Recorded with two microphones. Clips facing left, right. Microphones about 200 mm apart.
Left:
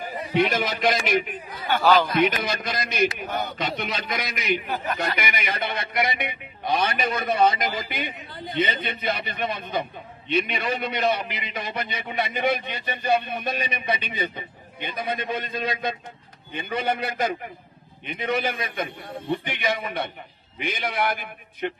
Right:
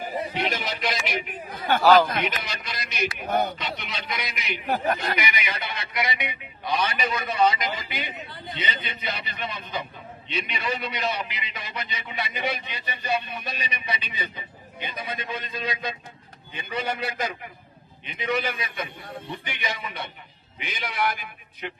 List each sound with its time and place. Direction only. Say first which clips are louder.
0.5 s a man's voice: left 6 dB; 50° left (ahead or behind)
1.5 s a sound: right 1 dB; 50° right (ahead or behind)
2.2 s a man's voice: left 7 dB; 50° left (ahead or behind)